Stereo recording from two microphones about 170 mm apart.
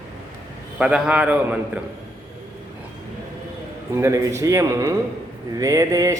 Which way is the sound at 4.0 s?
15° right (ahead or behind).